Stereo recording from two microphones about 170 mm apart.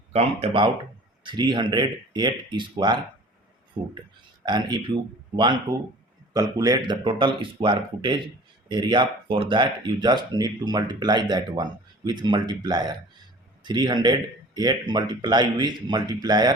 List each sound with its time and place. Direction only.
0.1 s speech: 35° right (ahead or behind)
4.4 s speech: 25° right (ahead or behind)
6.3 s speech: 20° right (ahead or behind)